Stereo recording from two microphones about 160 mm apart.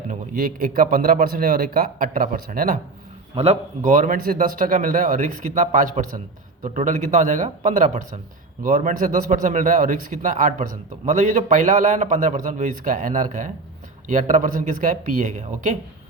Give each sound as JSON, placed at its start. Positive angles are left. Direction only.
{"t": 0.1, "sound": "a man's voice", "side_deg": -60}
{"t": 3.3, "sound": "a man's voice", "side_deg": -40}
{"t": 3.8, "sound": "a man's voice", "side_deg": -60}